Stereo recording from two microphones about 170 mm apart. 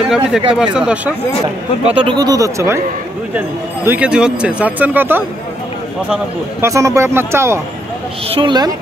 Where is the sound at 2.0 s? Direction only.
25° right (ahead or behind).